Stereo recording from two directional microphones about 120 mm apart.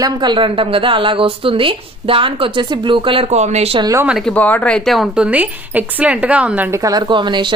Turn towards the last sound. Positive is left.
turn(degrees=-40)  # may be behind; listen again after turning